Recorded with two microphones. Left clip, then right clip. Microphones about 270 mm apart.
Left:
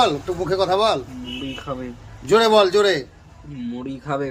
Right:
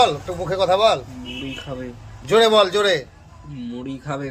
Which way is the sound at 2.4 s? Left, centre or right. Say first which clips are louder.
Even; left.